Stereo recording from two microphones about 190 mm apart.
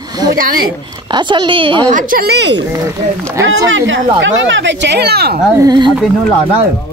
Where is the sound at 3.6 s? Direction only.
90° right.